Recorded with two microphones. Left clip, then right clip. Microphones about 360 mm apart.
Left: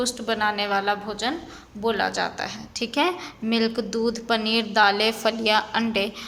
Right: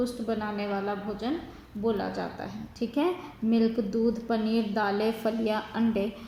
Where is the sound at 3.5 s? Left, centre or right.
Left.